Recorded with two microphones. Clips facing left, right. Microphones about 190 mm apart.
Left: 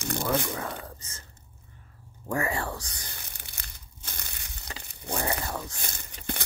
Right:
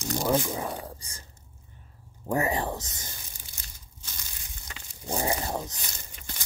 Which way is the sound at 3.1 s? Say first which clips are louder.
Left 2 dB; 65° left (ahead or behind).